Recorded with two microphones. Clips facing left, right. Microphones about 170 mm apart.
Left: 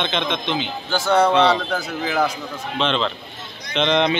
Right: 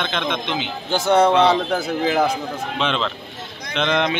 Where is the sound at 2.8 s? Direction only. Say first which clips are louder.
Left 3 dB; 5° right (ahead or behind).